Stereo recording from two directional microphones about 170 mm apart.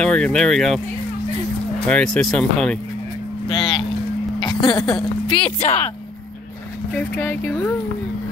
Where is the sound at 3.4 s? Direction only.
30° left (ahead or behind).